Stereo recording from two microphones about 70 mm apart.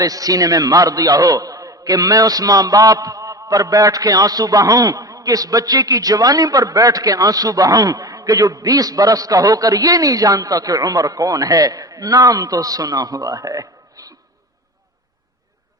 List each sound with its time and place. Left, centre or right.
0.0 s a man's voice: right